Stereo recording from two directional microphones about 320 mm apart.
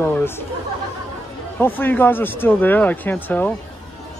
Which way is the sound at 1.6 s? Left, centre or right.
Centre.